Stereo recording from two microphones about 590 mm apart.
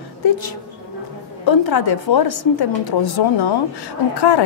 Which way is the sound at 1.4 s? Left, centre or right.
Left.